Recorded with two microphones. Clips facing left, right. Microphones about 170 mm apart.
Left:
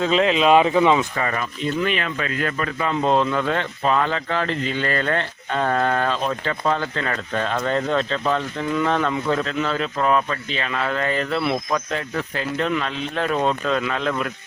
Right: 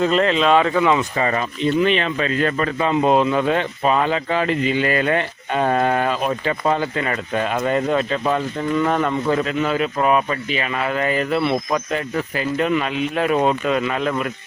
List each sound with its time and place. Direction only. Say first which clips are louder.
0.0 s speech: right 1 dB; centre (ahead or behind)
0.3 s speech: left 1 dB; 15° left (ahead or behind)
1.1 s speech: right 4 dB; 25° right (ahead or behind)
2.9 s speech: right 3 dB; 15° right (ahead or behind)